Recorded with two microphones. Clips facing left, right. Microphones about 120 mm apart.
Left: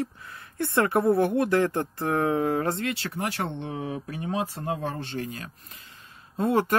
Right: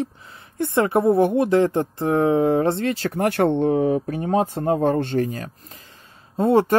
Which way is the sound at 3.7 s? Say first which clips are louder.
Right 13 dB; 40° right (ahead or behind).